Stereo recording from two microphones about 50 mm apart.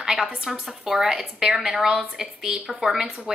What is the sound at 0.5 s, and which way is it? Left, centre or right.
A woman's voice, centre.